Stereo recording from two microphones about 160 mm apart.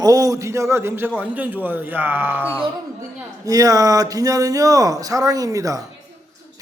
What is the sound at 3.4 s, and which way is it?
Speech, 25° right (ahead or behind).